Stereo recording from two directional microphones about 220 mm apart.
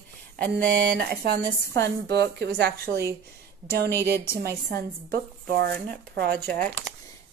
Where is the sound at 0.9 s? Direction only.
45° right (ahead or behind).